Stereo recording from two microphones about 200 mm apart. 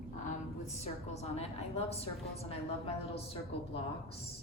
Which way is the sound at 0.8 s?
30° left (ahead or behind).